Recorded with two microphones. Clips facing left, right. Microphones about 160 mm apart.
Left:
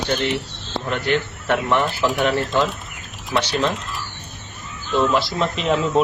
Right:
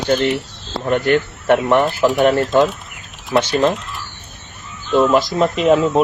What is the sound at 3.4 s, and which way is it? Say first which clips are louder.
Speech: right 5 dB; 50° right (ahead or behind).